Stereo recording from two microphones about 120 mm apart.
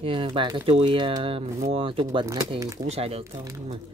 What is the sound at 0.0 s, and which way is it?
Speech, 45° right (ahead or behind).